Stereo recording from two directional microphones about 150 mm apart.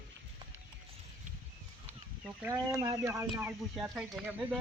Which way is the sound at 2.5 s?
20° right (ahead or behind).